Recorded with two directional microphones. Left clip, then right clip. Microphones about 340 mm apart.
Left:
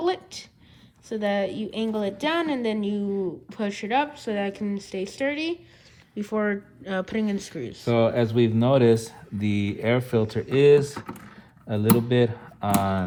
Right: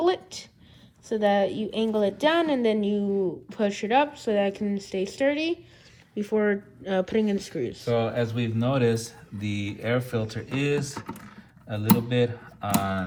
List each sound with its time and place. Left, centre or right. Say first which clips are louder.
0.0 s a sound: right 2 dB; centre
1.1 s speech: right 3 dB; centre
7.9 s speech: left 6 dB; left